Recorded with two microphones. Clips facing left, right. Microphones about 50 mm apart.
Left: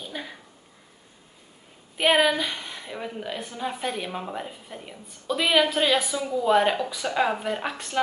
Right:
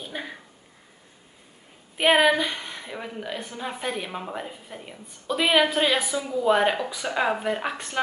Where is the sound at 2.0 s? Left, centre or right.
Centre.